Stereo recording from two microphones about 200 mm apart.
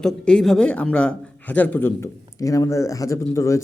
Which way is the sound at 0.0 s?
5° left (ahead or behind).